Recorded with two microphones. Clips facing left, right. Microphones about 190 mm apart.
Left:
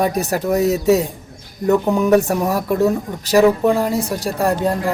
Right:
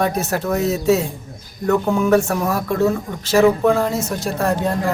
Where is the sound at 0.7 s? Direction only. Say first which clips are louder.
Even; 35° left (ahead or behind).